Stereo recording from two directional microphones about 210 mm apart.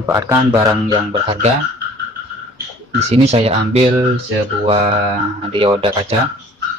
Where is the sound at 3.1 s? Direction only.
30° right (ahead or behind).